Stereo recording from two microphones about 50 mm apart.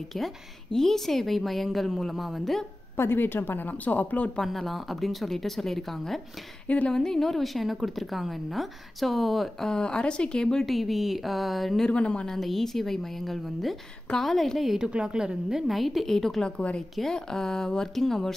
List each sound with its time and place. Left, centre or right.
0.1 s a woman's voice: centre
3.0 s a woman's voice: left
3.6 s speech: left
4.5 s a woman's voice: centre
9.7 s speech: centre
10.6 s a woman's voice: centre
11.9 s a woman's voice: left
12.3 s a woman's voice: centre
14.8 s a woman's voice: centre